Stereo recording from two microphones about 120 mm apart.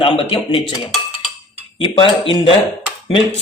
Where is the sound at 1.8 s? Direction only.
45° left (ahead or behind).